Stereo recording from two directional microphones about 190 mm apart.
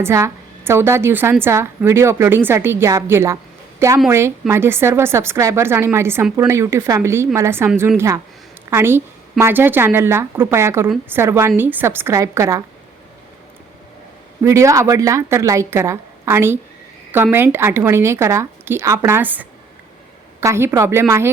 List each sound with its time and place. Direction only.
0.0 s a woman's voice: 15° right (ahead or behind)
14.4 s a woman's voice: 15° right (ahead or behind)